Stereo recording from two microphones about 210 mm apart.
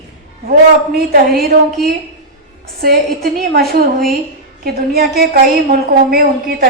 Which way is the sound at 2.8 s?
45° right (ahead or behind).